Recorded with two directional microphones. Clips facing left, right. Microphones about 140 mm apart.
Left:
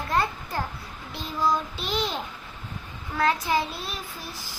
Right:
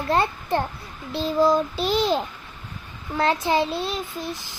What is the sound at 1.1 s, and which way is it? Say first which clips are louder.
Child singing: right 7 dB; 30° right (ahead or behind).